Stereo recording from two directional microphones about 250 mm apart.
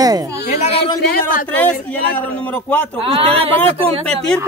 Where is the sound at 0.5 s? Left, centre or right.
Left.